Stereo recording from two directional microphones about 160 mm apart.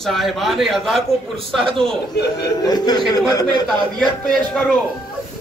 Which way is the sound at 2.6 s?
25° left (ahead or behind).